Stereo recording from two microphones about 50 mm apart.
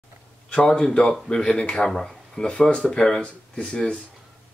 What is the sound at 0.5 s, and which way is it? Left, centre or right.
Speech, centre.